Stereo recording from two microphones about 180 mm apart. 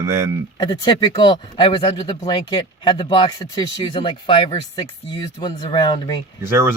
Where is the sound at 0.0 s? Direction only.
15° right (ahead or behind).